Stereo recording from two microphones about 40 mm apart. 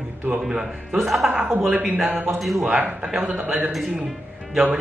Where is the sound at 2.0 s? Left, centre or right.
Right.